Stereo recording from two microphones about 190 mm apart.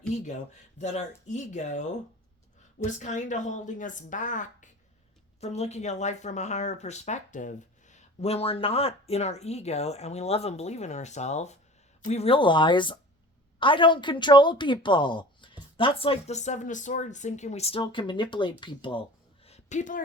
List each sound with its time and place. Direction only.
0.8 s speech: 40° left (ahead or behind)
2.8 s speech: 40° left (ahead or behind)
19.5 s a sound: 35° left (ahead or behind)